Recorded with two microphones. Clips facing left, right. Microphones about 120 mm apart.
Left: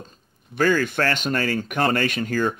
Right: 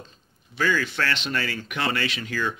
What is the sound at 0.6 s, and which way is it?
Speech, 50° left (ahead or behind).